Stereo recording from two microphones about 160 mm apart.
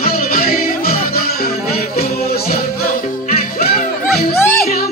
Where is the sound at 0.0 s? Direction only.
70° left (ahead or behind).